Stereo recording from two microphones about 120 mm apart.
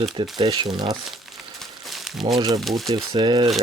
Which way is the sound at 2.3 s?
35° right (ahead or behind).